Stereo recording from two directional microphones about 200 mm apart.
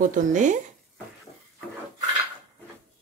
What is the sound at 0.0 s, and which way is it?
Speech, 40° right (ahead or behind).